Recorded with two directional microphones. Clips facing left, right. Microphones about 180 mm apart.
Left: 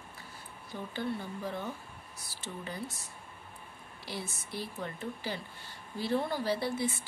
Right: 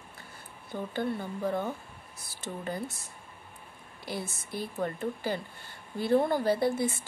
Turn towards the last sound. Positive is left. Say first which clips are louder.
# right 5 dB
turn(degrees=-50)  # may be behind; listen again after turning